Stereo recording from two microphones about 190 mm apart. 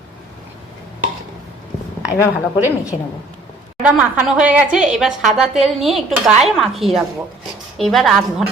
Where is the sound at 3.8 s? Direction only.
5° right (ahead or behind).